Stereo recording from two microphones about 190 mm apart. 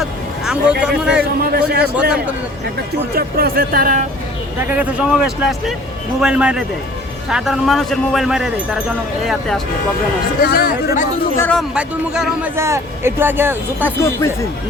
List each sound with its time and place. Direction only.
0.4 s speech: 5° right (ahead or behind)
1.4 s speech: 55° right (ahead or behind)
3.2 s speech: 55° right (ahead or behind)
4.7 s speech: 5° right (ahead or behind)
10.4 s speech: 50° left (ahead or behind)
11.3 s speech: 10° left (ahead or behind)
11.7 s speech: 5° right (ahead or behind)
14.0 s speech: 15° left (ahead or behind)